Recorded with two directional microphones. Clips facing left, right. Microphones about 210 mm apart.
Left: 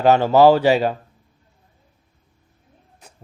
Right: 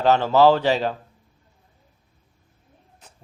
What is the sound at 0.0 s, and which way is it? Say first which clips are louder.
Speech: left 3 dB; 10° left (ahead or behind).